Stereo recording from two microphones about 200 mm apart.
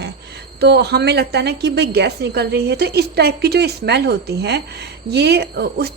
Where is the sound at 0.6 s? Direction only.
55° right (ahead or behind).